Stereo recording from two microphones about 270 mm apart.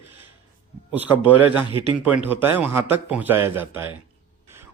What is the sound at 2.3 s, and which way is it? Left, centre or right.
A man's voice, centre.